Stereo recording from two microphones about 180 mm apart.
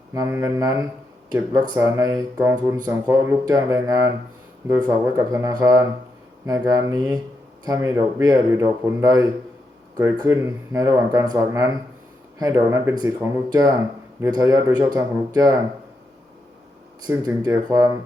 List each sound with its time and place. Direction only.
0.1 s speech: 15° right (ahead or behind)
17.1 s speech: 15° right (ahead or behind)